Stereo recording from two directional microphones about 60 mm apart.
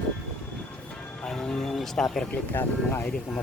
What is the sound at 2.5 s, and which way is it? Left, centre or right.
Speech, left.